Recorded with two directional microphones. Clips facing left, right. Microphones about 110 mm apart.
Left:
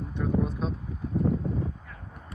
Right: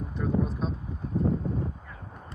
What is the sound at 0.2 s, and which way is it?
Speech, centre (ahead or behind).